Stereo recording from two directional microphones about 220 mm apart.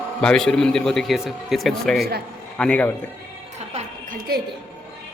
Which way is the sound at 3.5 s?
30° right (ahead or behind).